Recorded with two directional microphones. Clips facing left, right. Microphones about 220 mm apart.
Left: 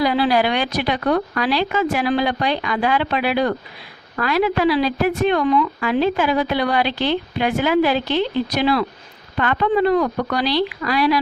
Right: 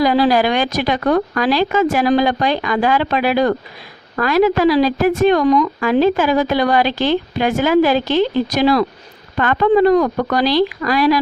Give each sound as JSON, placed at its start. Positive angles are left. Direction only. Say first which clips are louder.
{"t": 0.0, "sound": "a woman's voice", "louder": "right 4 dB", "side_deg": -45}